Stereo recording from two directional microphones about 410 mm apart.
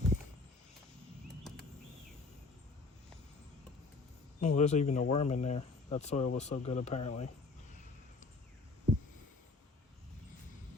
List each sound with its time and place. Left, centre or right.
4.4 s speech: centre